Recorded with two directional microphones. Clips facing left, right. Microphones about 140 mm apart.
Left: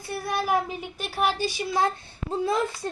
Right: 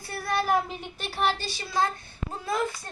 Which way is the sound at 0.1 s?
15° left (ahead or behind).